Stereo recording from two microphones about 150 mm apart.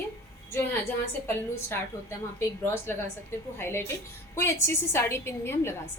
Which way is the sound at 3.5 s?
15° left (ahead or behind).